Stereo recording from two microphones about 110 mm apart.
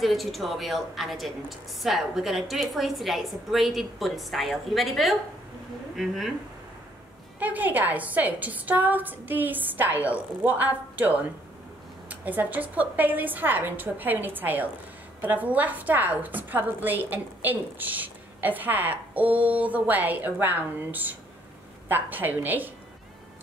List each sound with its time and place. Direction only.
0.0 s a woman's voice: centre (ahead or behind)
7.3 s a woman's voice: 15° right (ahead or behind)